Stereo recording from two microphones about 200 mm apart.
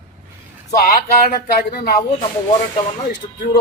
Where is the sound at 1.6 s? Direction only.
50° left (ahead or behind).